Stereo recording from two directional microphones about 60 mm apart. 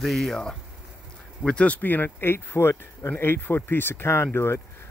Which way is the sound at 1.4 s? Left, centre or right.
Left.